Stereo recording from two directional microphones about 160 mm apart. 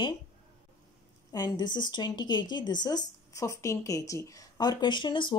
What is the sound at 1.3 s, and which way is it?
A woman's voice, 25° left (ahead or behind).